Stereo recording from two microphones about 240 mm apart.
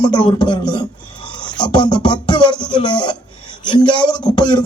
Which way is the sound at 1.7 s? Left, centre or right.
Centre.